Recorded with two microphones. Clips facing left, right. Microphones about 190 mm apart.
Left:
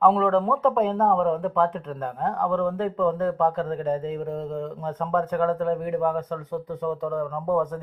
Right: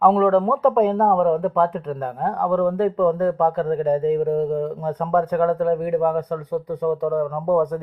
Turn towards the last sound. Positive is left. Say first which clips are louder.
# right 5 dB
turn(degrees=-15)  # may be behind; listen again after turning